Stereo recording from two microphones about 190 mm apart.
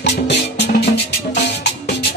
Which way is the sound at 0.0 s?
65° left (ahead or behind).